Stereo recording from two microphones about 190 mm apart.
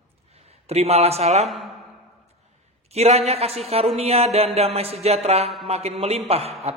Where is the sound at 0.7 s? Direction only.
35° right (ahead or behind).